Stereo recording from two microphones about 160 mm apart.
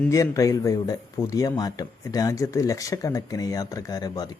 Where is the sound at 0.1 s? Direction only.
20° left (ahead or behind).